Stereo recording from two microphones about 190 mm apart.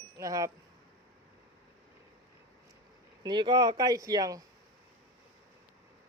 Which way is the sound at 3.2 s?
25° right (ahead or behind).